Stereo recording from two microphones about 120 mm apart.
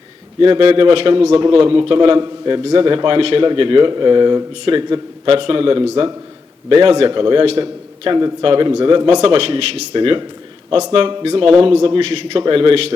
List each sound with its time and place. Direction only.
0.3 s a man's voice: 45° right (ahead or behind)
9.1 s a man's voice: 55° right (ahead or behind)